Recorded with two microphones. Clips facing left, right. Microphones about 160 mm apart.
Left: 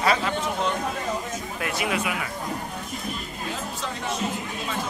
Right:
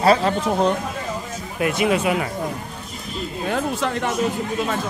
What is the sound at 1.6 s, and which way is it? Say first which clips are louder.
Speech: right 9 dB; 20° right (ahead or behind).